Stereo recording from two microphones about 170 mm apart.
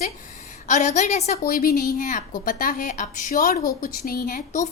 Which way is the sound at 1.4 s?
60° left (ahead or behind).